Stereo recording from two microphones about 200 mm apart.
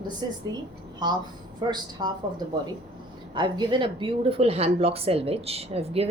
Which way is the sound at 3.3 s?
25° right (ahead or behind).